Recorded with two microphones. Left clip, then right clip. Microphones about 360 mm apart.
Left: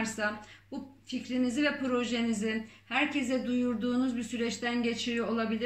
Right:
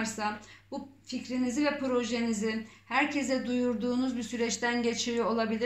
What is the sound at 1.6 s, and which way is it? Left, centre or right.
Speech, centre.